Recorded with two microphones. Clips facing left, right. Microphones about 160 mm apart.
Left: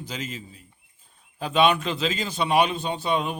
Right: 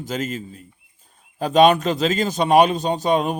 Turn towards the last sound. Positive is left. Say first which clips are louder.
# right 6 dB
turn(degrees=-45)  # may be behind; listen again after turning